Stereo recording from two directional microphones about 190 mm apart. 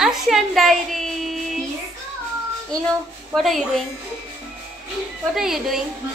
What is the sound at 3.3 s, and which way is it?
Speech, centre (ahead or behind).